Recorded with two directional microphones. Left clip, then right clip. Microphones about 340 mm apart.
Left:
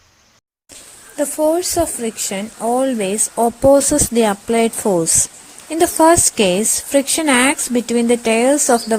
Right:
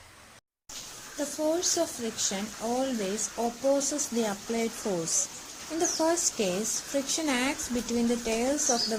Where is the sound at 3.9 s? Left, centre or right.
Left.